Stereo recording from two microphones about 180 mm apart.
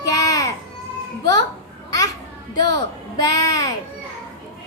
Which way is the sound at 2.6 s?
20° left (ahead or behind).